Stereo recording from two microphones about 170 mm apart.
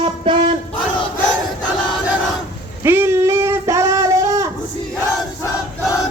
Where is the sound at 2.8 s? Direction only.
15° right (ahead or behind).